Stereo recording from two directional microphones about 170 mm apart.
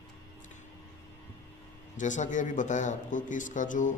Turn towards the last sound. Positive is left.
turn(degrees=50)  # may be behind; listen again after turning